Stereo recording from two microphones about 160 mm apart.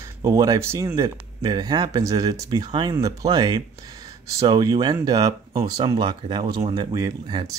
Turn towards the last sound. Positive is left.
turn(degrees=-25)  # may be behind; listen again after turning